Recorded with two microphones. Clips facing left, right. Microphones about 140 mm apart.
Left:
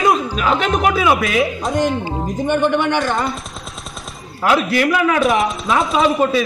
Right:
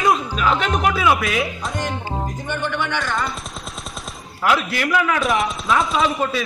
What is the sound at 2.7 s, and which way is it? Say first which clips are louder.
Speech: left 7 dB; 55° left (ahead or behind).